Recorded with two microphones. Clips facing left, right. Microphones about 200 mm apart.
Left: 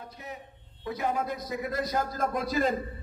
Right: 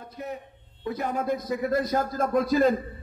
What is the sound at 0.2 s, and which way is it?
A man's voice, 55° right (ahead or behind).